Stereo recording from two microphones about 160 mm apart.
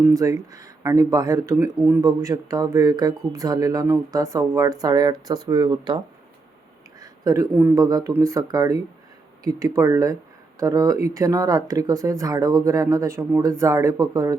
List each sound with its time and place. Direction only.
0.0 s speech: 20° right (ahead or behind)
7.0 s a sound: 20° right (ahead or behind)
7.5 s speech: 15° right (ahead or behind)